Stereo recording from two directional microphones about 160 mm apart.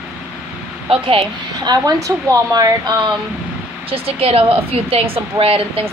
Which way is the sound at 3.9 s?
35° right (ahead or behind).